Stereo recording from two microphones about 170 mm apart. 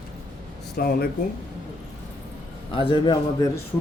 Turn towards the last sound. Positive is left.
turn(degrees=25)  # may be behind; listen again after turning